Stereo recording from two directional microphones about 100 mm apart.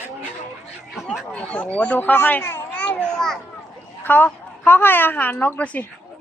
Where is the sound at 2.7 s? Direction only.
15° left (ahead or behind).